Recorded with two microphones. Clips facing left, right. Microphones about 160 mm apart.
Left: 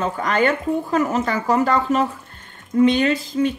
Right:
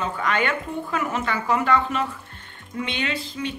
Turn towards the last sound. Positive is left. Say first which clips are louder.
# left 9 dB
turn(degrees=45)  # may be behind; listen again after turning